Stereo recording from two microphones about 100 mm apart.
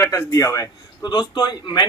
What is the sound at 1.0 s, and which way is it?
Speech, 45° left (ahead or behind).